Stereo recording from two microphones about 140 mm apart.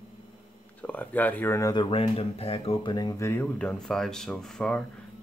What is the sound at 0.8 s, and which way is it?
Speech, 10° left (ahead or behind).